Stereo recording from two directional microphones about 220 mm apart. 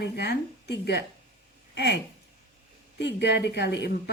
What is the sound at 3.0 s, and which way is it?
Speech, 50° left (ahead or behind).